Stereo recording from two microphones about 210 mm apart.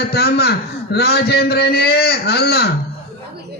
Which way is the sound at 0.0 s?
50° left (ahead or behind).